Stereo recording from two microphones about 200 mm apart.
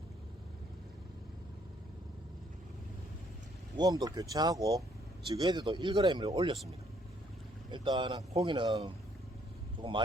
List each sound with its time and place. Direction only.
3.8 s speech: 20° right (ahead or behind)
7.7 s speech: 20° right (ahead or behind)